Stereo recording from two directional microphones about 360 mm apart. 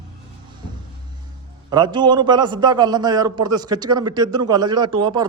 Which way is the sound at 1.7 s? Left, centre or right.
Centre.